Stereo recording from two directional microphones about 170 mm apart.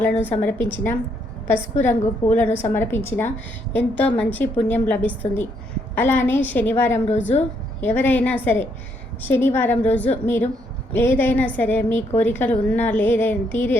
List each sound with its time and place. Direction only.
0.0 s a woman's voice: 10° left (ahead or behind)
1.8 s a woman's voice: 10° left (ahead or behind)
7.1 s a woman's voice: 40° left (ahead or behind)
7.8 s a woman's voice: 10° left (ahead or behind)